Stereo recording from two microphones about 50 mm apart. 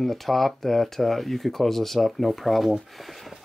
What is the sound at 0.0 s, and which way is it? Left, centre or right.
Speech, centre.